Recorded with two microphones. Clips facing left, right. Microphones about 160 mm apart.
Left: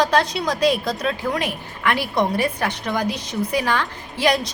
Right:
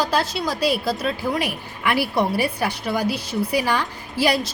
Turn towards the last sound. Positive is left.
turn(degrees=-5)  # may be behind; listen again after turning